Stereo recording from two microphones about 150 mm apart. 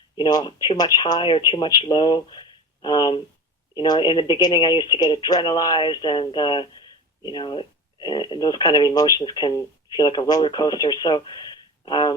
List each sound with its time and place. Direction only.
0.2 s speech: 30° left (ahead or behind)